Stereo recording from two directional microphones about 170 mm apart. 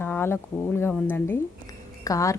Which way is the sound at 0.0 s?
10° left (ahead or behind).